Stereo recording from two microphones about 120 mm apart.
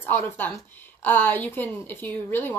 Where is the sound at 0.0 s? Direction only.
20° left (ahead or behind).